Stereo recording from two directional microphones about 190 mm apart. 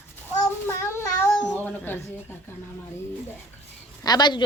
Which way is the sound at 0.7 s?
15° left (ahead or behind).